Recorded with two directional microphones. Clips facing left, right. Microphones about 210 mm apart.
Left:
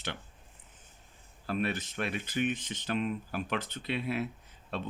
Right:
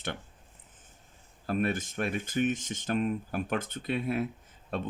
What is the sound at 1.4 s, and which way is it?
Speech, 45° right (ahead or behind).